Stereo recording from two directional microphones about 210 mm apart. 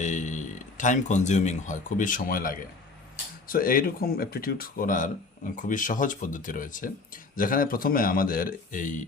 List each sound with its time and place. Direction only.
0.0 s speech: 35° left (ahead or behind)